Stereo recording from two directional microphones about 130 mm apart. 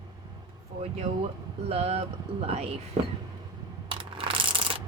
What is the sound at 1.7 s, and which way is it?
Speech, 50° right (ahead or behind).